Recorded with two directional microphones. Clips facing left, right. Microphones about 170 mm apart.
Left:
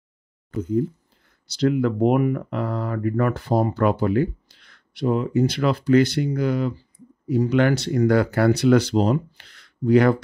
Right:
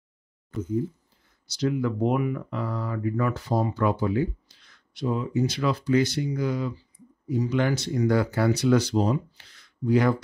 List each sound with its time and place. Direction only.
0.6 s speech: 65° left (ahead or behind)